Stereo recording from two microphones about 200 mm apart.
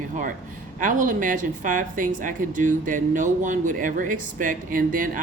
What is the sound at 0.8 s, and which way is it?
Speech, 40° right (ahead or behind).